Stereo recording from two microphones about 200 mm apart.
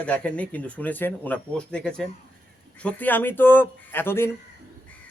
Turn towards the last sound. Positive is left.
turn(degrees=10)  # may be behind; listen again after turning